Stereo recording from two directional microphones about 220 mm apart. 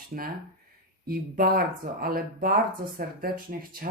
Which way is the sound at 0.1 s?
40° right (ahead or behind).